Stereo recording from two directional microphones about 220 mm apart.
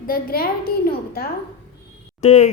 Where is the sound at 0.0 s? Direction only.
40° left (ahead or behind).